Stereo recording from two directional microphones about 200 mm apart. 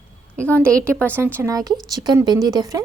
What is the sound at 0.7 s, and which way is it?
A woman's voice, 15° right (ahead or behind).